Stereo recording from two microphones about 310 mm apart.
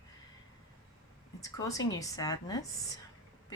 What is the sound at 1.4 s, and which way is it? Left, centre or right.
Speech, centre.